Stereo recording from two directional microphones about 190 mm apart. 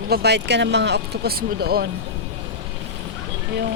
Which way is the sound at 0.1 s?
60° right (ahead or behind).